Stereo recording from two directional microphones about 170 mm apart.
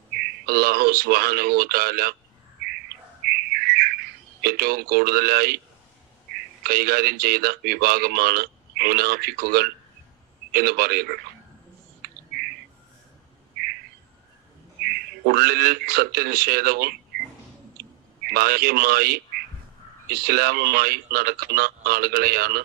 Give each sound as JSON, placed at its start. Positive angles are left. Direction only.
{"t": 0.1, "sound": "speech", "side_deg": -65}
{"t": 3.2, "sound": "bird", "side_deg": -65}
{"t": 4.4, "sound": "speech", "side_deg": -65}
{"t": 12.0, "sound": "bird", "side_deg": -65}
{"t": 14.8, "sound": "speech", "side_deg": -65}
{"t": 17.7, "sound": "a sound", "side_deg": -65}
{"t": 20.1, "sound": "speech", "side_deg": -65}